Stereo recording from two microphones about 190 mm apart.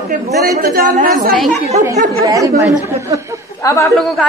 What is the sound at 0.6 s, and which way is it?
Speech, 45° right (ahead or behind).